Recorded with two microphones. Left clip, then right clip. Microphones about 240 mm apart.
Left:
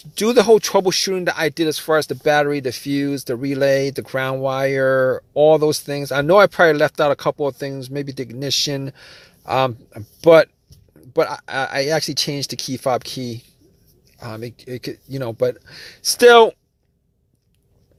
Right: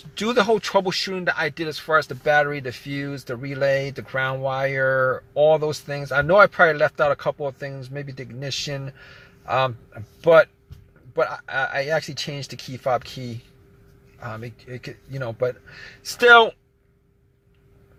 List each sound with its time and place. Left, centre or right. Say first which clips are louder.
0.0 s speech: left 5 dB; left